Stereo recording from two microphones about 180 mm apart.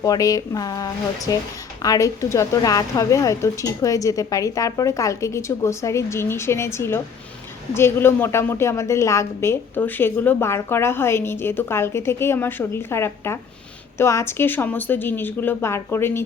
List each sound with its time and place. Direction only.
0.0 s a woman's voice: 20° left (ahead or behind)